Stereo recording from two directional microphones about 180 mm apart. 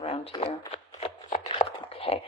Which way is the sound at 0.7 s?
35° left (ahead or behind).